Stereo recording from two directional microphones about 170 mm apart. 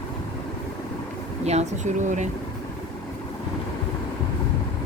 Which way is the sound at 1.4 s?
40° right (ahead or behind).